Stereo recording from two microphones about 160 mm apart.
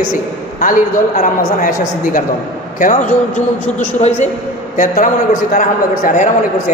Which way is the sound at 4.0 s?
45° left (ahead or behind).